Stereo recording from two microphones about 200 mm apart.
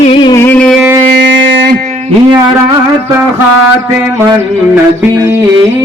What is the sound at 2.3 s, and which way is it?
Music, 25° right (ahead or behind).